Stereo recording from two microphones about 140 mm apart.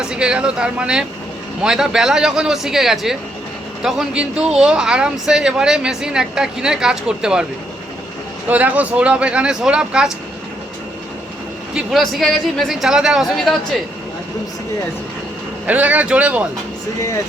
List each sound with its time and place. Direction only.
0.0 s speech: 5° right (ahead or behind)
8.4 s speech: 10° right (ahead or behind)
11.7 s speech: centre (ahead or behind)
15.6 s speech: 10° right (ahead or behind)